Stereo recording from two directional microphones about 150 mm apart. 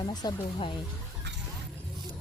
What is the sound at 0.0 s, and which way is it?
Speech, 25° left (ahead or behind).